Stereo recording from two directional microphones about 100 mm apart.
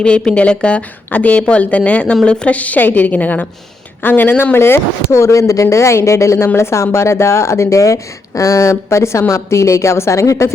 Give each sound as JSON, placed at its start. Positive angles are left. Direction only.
{"t": 0.0, "sound": "a woman's voice", "side_deg": 10}